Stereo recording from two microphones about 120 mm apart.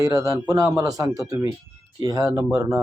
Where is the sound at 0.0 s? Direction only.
30° right (ahead or behind).